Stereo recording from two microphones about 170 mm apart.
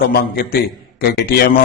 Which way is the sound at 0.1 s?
65° left (ahead or behind).